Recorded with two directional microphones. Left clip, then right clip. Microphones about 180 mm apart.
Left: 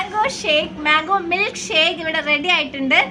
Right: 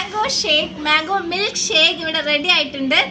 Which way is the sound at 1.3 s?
25° left (ahead or behind).